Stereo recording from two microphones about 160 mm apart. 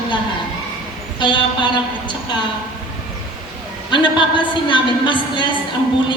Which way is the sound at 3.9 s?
30° left (ahead or behind).